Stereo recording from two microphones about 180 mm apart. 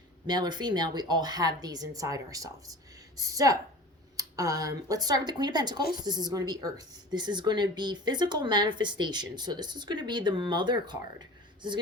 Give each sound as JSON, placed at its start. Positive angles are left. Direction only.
{"t": 0.3, "sound": "speech", "side_deg": -25}